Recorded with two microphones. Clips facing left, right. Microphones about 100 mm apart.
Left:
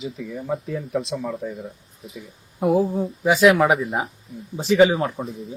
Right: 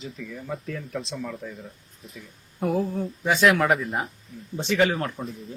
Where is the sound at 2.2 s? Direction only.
5° left (ahead or behind).